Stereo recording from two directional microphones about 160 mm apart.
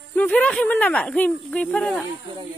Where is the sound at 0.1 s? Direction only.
10° left (ahead or behind).